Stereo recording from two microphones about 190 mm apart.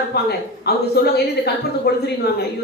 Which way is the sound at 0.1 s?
55° left (ahead or behind).